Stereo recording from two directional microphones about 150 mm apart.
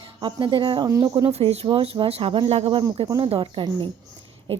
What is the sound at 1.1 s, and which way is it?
A woman's voice, 40° right (ahead or behind).